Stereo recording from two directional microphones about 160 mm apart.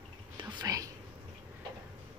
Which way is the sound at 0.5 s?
20° right (ahead or behind).